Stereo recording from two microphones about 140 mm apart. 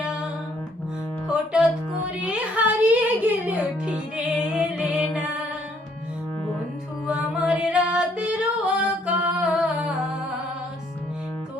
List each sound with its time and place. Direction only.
0.0 s music: 5° right (ahead or behind)
1.3 s music: 5° right (ahead or behind)
7.1 s female singing: 5° right (ahead or behind)